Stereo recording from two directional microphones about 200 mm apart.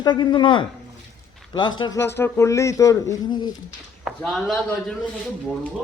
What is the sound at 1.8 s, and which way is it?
Speech, 15° left (ahead or behind).